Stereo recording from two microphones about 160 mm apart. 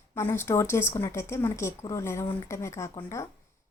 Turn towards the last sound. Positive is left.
turn(degrees=20)  # may be behind; listen again after turning